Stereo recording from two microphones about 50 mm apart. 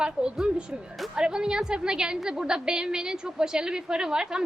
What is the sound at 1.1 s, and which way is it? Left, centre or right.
A woman's voice, centre.